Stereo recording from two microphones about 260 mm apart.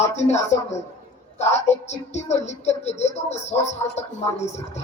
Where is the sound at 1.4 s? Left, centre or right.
Left.